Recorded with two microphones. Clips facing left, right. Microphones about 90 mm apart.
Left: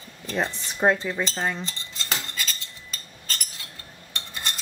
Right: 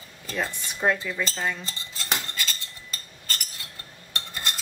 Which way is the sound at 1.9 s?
5° right (ahead or behind).